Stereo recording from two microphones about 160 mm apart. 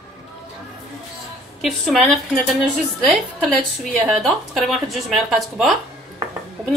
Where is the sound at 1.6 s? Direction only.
Centre (ahead or behind).